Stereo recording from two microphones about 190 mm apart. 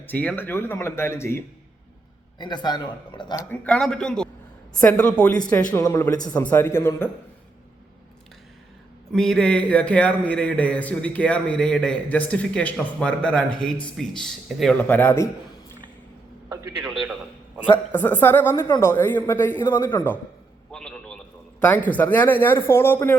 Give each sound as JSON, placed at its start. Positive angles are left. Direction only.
{"t": 0.1, "sound": "a man's voice", "side_deg": 10}
{"t": 3.5, "sound": "a man's voice", "side_deg": 5}
{"t": 9.1, "sound": "a man's voice", "side_deg": 5}
{"t": 16.5, "sound": "a sound", "side_deg": -15}
{"t": 16.8, "sound": "a man's voice", "side_deg": 0}
{"t": 20.7, "sound": "a sound", "side_deg": 5}
{"t": 21.6, "sound": "a man's voice", "side_deg": 10}